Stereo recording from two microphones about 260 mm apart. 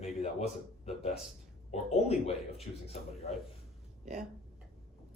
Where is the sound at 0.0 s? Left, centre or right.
Left.